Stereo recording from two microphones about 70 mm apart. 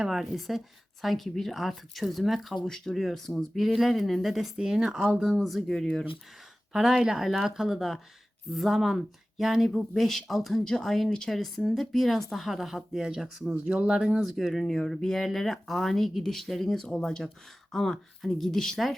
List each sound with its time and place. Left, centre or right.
0.0 s speech: centre
14.3 s speech: centre